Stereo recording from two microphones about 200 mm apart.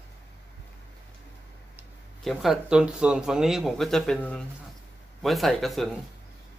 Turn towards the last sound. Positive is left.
turn(degrees=0)  # may be behind; listen again after turning